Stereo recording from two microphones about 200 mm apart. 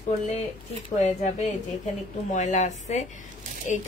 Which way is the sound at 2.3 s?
35° left (ahead or behind).